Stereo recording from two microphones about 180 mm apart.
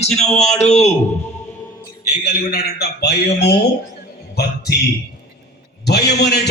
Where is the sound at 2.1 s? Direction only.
55° left (ahead or behind).